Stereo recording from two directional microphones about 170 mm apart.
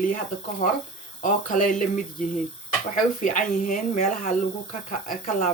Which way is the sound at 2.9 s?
50° left (ahead or behind).